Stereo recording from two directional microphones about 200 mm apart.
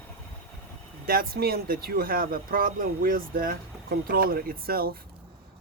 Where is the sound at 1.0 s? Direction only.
50° right (ahead or behind).